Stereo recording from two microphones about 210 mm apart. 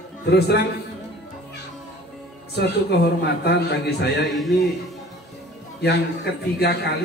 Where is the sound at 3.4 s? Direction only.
50° left (ahead or behind).